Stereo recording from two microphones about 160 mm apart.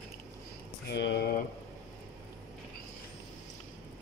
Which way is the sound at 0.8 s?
90° left.